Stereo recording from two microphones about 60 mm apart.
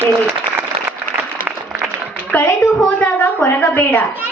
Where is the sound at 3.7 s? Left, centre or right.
Left.